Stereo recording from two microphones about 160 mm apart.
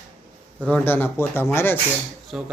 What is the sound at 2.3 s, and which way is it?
Speech, 5° right (ahead or behind).